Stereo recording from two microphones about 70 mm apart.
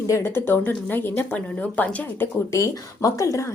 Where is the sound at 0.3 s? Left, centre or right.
Left.